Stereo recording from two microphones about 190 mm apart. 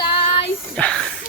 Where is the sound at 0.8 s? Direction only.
5° left (ahead or behind).